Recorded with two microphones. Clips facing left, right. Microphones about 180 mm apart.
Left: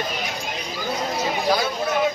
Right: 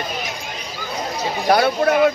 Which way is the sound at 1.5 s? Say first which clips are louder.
Right 10 dB; 65° right (ahead or behind).